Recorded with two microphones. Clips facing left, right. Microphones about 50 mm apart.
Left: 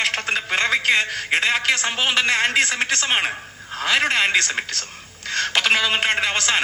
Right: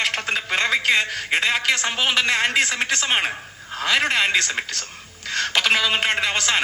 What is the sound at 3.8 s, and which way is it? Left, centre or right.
A man's voice, centre.